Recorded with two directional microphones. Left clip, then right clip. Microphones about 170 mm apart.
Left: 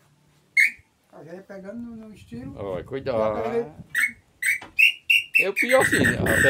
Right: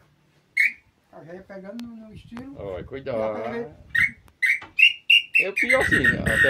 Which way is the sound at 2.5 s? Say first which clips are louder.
Left 3 dB; 15° left (ahead or behind).